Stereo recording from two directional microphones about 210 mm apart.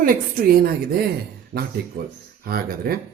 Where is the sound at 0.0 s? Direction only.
45° right (ahead or behind).